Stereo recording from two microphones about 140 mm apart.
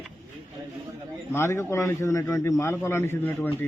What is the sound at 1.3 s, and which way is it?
A man's voice, 20° left (ahead or behind).